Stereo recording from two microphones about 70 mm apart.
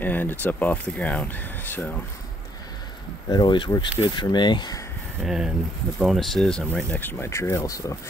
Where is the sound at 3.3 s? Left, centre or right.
Left.